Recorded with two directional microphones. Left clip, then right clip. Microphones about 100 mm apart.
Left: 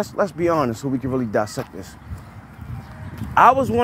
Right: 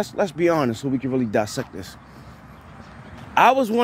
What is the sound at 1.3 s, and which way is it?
Speech, 35° right (ahead or behind).